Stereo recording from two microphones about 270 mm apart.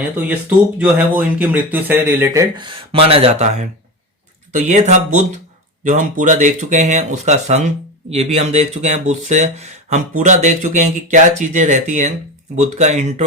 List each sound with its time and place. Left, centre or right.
0.8 s speech: centre; by 3.5 s right
4.5 s speech: right